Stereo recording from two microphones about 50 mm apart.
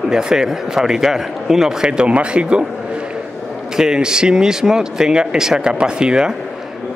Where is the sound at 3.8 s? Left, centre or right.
Centre.